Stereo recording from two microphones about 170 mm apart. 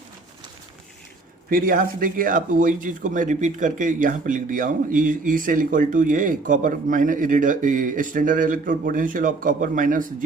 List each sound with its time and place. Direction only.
1.5 s speech: 55° right (ahead or behind)